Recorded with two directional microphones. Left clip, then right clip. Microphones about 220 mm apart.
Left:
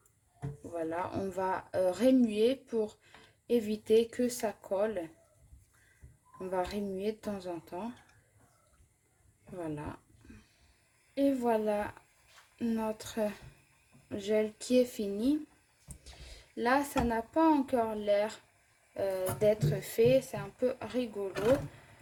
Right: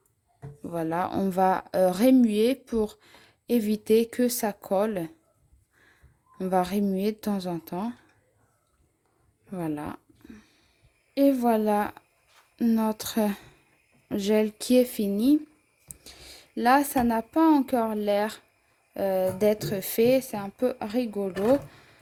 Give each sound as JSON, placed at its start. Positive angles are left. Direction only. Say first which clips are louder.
{"t": 0.7, "sound": "a woman's voice", "louder": "right 7 dB", "side_deg": -45}
{"t": 6.4, "sound": "a woman's voice", "louder": "right 9 dB", "side_deg": -45}
{"t": 9.6, "sound": "a sound", "louder": "right 7 dB", "side_deg": -40}
{"t": 11.1, "sound": "a woman's voice", "louder": "right 7 dB", "side_deg": -45}